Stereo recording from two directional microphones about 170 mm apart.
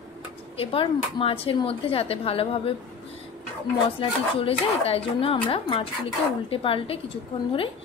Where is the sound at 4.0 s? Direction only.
35° left (ahead or behind).